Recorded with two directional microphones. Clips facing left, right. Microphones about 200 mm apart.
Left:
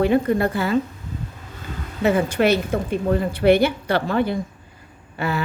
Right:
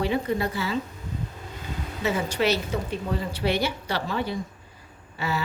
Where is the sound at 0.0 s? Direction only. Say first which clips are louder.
Left 7 dB; 55° left (ahead or behind).